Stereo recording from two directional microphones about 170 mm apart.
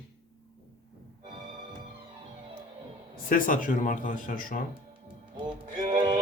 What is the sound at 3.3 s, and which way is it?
Speech, 55° left (ahead or behind).